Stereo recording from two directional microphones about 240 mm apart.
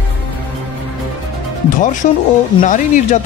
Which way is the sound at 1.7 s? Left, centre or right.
Left.